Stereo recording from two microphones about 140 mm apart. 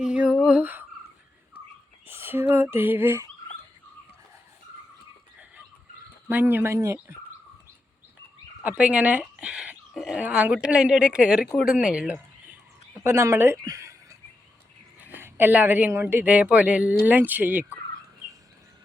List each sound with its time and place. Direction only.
0.0 s a sound: 5° right (ahead or behind)
2.0 s a sound: 15° right (ahead or behind)
6.2 s speech: 15° right (ahead or behind)
8.6 s speech: 10° right (ahead or behind)
13.1 s a woman's voice: 20° right (ahead or behind)
14.9 s speech: 10° right (ahead or behind)